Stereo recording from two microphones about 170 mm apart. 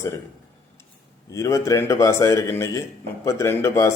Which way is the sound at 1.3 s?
20° left (ahead or behind).